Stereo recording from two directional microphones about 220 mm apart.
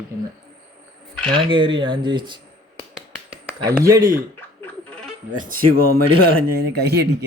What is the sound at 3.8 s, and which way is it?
Speech, 15° right (ahead or behind).